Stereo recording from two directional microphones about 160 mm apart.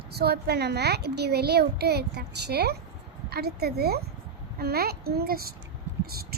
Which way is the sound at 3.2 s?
80° right.